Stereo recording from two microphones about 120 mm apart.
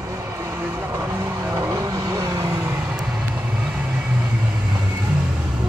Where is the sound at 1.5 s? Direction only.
25° right (ahead or behind).